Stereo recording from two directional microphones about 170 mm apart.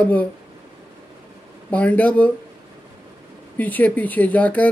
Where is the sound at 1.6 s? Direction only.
10° left (ahead or behind).